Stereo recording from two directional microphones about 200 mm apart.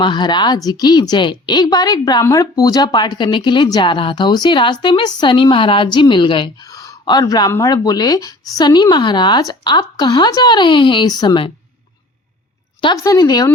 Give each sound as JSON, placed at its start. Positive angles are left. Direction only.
{"t": 0.0, "sound": "a woman's voice", "side_deg": 20}
{"t": 12.8, "sound": "a woman's voice", "side_deg": 20}